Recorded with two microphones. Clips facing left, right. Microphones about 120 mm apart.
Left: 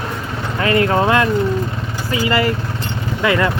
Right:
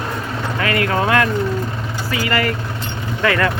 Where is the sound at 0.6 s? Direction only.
30° left (ahead or behind).